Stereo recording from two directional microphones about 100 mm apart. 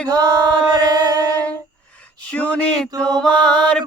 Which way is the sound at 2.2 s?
15° left (ahead or behind).